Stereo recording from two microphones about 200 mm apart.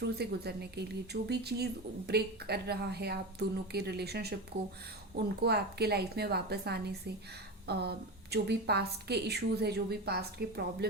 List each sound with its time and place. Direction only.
0.2 s a woman's voice: 55° right (ahead or behind)